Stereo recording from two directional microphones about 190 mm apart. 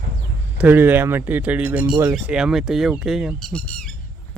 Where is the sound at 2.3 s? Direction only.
5° right (ahead or behind).